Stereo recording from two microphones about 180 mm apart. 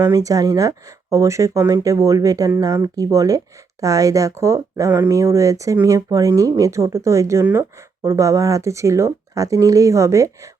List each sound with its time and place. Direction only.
0.1 s speech: 20° right (ahead or behind)